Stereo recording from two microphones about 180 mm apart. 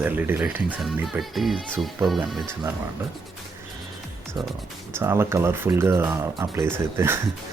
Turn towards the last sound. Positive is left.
turn(degrees=-15)  # may be behind; listen again after turning